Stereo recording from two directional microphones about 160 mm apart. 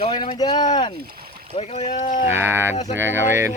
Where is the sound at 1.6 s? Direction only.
40° left (ahead or behind).